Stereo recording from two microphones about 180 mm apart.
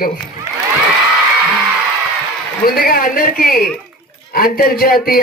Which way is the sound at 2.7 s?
55° left (ahead or behind).